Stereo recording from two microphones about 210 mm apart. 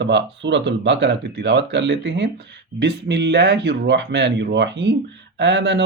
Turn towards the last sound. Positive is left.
turn(degrees=-55)  # may be behind; listen again after turning